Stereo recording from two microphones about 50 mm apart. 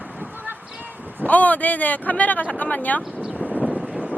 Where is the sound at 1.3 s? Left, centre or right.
Left.